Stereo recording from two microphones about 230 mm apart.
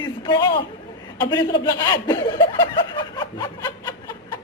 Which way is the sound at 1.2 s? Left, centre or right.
Centre.